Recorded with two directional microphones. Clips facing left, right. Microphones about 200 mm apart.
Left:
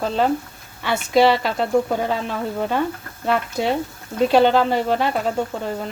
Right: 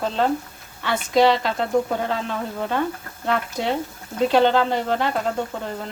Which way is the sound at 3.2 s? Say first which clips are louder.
Left 3 dB; 10° left (ahead or behind).